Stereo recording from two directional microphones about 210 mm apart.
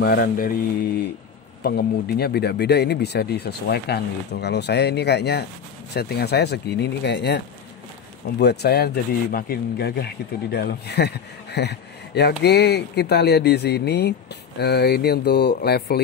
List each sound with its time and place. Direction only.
0.0 s speech: 50° left (ahead or behind)
1.6 s speech: 50° left (ahead or behind)